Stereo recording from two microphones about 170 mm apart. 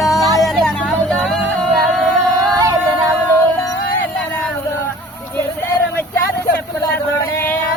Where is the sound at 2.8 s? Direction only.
10° right (ahead or behind).